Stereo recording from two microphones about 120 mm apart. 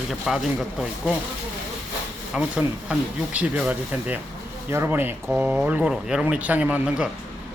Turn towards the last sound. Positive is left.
turn(degrees=-5)  # may be behind; listen again after turning